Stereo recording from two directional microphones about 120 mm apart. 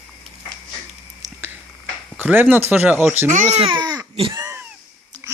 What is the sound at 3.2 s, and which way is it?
Speech, 90° right.